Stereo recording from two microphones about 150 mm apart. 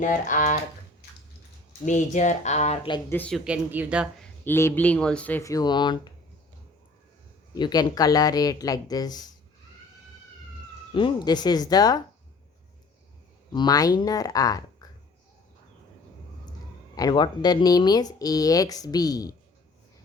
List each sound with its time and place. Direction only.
0.0 s speech: 60° left (ahead or behind)
1.8 s speech: 55° left (ahead or behind)
3.1 s speech: 10° left (ahead or behind)
3.3 s speech: 10° right (ahead or behind)
4.2 s a man's voice: 15° left (ahead or behind)
5.4 s speech: 25° left (ahead or behind)
7.5 s speech: 25° left (ahead or behind)
10.9 s speech: 30° left (ahead or behind)
13.5 s speech: 30° left (ahead or behind)
17.0 s speech: 30° left (ahead or behind)